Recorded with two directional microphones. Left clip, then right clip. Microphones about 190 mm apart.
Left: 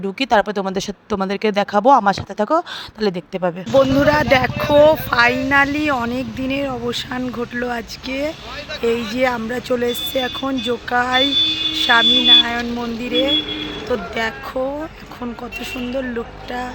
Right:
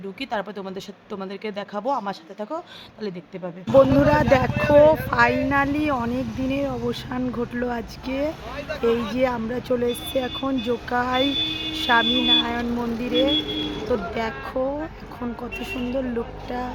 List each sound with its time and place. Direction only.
0.2 s speech: 45° left (ahead or behind)
4.0 s speech: centre (ahead or behind)
12.0 s speech: 45° right (ahead or behind)
12.3 s speech: centre (ahead or behind)